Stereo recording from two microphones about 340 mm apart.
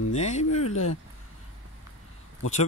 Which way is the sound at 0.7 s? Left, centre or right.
Left.